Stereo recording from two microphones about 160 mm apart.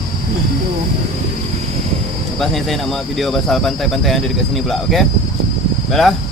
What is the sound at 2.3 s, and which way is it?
Speech, centre (ahead or behind).